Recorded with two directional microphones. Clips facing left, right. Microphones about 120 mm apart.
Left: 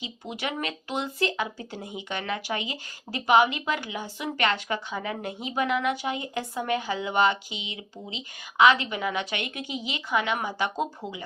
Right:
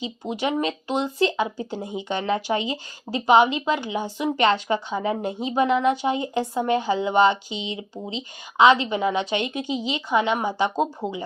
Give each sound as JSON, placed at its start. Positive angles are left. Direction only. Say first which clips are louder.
{"t": 0.0, "sound": "speech", "louder": "right 7 dB", "side_deg": -25}